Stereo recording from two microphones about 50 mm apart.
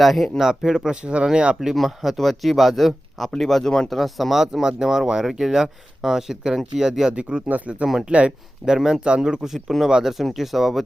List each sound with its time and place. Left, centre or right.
0.0 s speech: centre
1.6 s speech: centre
3.8 s speech: centre
7.1 s speech: right
8.6 s speech: centre
9.6 s speech: centre
9.8 s speech: centre